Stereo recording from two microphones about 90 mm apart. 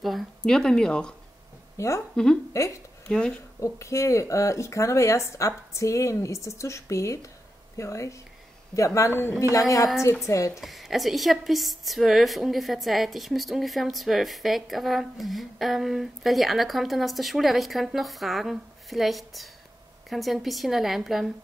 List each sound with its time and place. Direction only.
0.0 s speech: centre (ahead or behind)
1.8 s speech: 35° left (ahead or behind)
3.1 s speech: 10° left (ahead or behind)
3.6 s speech: 35° left (ahead or behind)
10.6 s a woman's voice: centre (ahead or behind)